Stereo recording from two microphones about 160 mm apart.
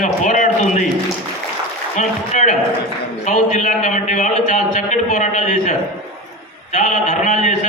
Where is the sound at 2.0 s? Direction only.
50° left (ahead or behind).